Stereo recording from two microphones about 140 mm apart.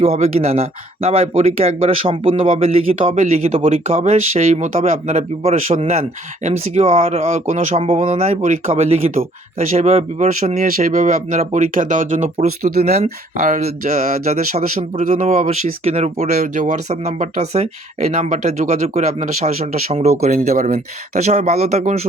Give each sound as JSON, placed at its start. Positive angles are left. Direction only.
{"t": 0.0, "sound": "speech", "side_deg": -45}
{"t": 10.6, "sound": "speech", "side_deg": -75}
{"t": 15.8, "sound": "speech", "side_deg": -45}
{"t": 16.4, "sound": "speech", "side_deg": -60}